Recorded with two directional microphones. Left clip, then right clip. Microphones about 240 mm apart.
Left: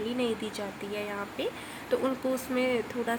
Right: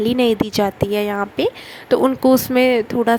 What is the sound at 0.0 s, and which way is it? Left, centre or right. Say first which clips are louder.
A woman's voice: right 14 dB; right.